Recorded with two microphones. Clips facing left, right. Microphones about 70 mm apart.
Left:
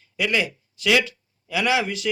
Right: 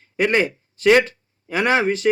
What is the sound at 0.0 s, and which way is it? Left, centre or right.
Speech, right.